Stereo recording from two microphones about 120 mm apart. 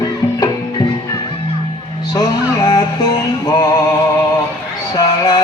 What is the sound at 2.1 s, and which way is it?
Music, 35° left (ahead or behind).